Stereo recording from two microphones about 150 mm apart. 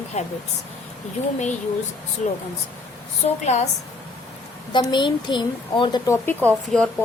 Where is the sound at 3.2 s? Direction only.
45° left (ahead or behind).